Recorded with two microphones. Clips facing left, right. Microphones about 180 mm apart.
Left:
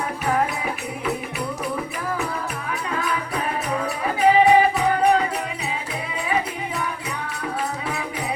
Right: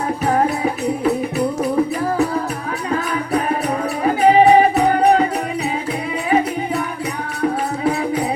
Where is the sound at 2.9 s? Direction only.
40° right (ahead or behind).